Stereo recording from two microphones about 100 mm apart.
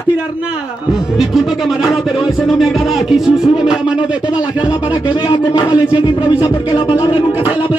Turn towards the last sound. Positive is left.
turn(degrees=45)  # may be behind; listen again after turning